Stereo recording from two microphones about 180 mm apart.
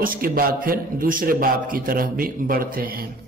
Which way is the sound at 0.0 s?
55° right (ahead or behind).